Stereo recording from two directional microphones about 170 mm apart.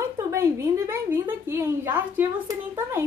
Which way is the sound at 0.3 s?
15° right (ahead or behind).